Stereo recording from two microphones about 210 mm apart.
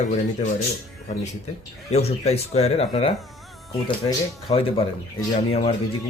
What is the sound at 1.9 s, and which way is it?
Speech, 30° left (ahead or behind).